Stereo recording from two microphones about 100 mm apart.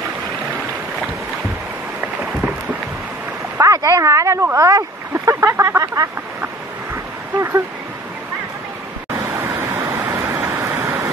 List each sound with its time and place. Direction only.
3.5 s speech: 30° right (ahead or behind)
7.3 s a sound: 30° right (ahead or behind)
9.3 s vehicle: 25° right (ahead or behind)